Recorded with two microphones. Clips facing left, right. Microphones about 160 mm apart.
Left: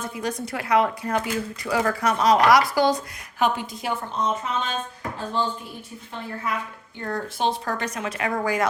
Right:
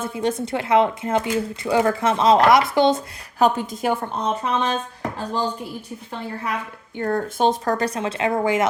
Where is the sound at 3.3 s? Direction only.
40° right (ahead or behind).